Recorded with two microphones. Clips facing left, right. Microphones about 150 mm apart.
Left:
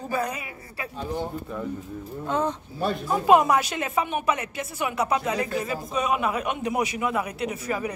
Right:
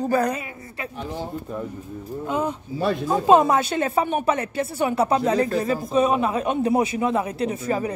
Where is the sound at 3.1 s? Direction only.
25° right (ahead or behind).